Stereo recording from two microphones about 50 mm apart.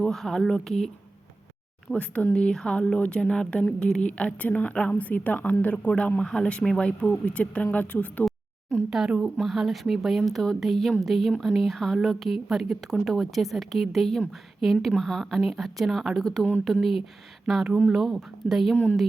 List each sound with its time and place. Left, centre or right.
0.1 s speech: centre
1.9 s a woman's voice: left
6.1 s a woman's voice: centre
8.9 s speech: centre
9.4 s a woman's voice: centre
17.4 s a woman's voice: centre